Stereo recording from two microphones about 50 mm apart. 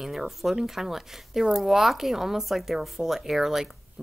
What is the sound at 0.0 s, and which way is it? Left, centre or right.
Speech, centre.